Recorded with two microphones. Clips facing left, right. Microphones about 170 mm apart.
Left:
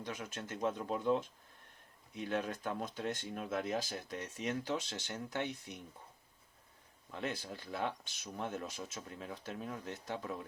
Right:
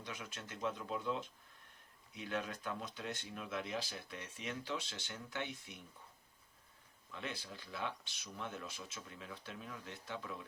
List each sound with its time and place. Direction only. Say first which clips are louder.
0.0 s speech: left 5 dB; 45° left (ahead or behind)
7.1 s speech: left 6 dB; 45° left (ahead or behind)